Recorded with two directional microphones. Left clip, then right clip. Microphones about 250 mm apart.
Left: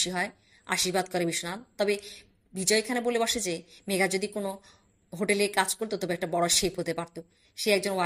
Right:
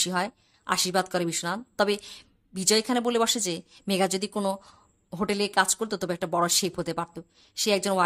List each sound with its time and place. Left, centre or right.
0.0 s a woman's voice: centre